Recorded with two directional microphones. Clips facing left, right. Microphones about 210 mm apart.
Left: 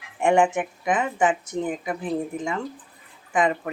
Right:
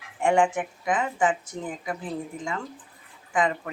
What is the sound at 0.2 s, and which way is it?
Speech, 20° left (ahead or behind).